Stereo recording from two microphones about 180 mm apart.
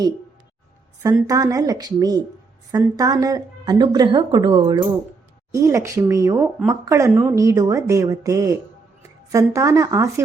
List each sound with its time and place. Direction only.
1.0 s a woman's voice: 20° right (ahead or behind)